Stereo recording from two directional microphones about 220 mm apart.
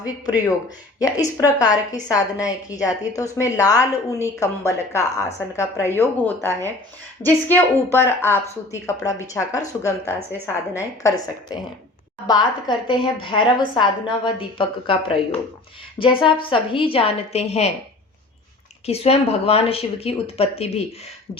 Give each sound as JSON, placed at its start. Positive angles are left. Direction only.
{"t": 0.9, "sound": "a woman's voice", "side_deg": 15}
{"t": 18.9, "sound": "speech", "side_deg": 25}